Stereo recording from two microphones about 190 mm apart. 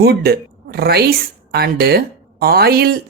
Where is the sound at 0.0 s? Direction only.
55° right (ahead or behind).